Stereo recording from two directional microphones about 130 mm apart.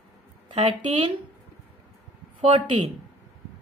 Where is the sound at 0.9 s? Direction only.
45° right (ahead or behind).